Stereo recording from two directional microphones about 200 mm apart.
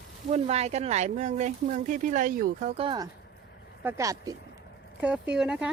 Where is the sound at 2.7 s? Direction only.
25° right (ahead or behind).